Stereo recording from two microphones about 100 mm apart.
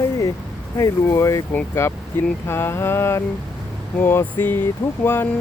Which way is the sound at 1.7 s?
25° left (ahead or behind).